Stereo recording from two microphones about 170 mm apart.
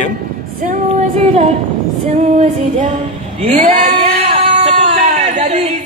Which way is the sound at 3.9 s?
35° right (ahead or behind).